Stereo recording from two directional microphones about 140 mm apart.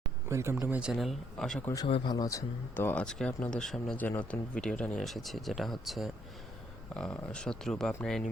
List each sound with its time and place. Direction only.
0.3 s speech: 20° right (ahead or behind)
0.7 s speech: 5° right (ahead or behind)
1.6 s a man's voice: 25° left (ahead or behind); by 7.9 s 5° left (ahead or behind)